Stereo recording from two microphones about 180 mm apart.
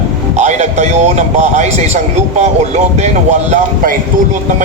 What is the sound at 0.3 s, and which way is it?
A man's voice, 40° right (ahead or behind).